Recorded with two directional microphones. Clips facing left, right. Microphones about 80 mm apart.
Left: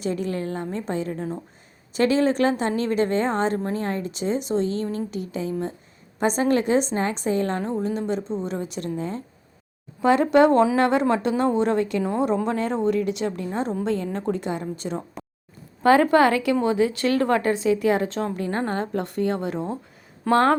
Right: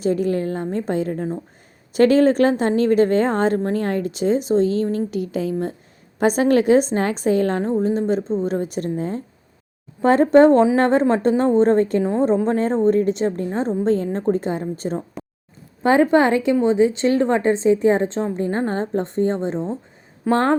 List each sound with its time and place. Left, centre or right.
0.0 s a woman's voice: right
15.2 s a sound: centre
15.8 s a woman's voice: right